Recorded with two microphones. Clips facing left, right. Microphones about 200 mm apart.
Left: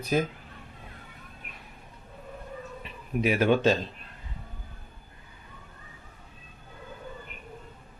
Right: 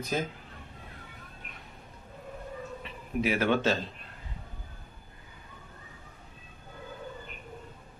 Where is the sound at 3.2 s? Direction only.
15° left (ahead or behind).